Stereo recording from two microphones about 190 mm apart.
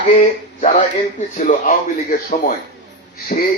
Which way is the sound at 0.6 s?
40° left (ahead or behind).